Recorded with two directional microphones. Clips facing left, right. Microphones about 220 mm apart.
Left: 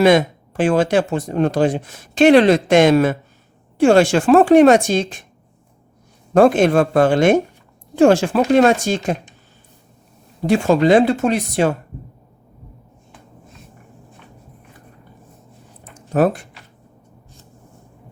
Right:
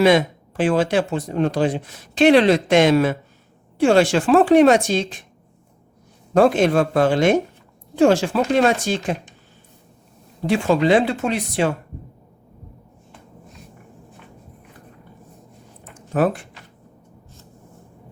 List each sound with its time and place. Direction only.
0.0 s speech: 50° left (ahead or behind)
6.3 s speech: 50° left (ahead or behind)
10.4 s speech: 45° left (ahead or behind)
15.8 s a sound: 40° left (ahead or behind)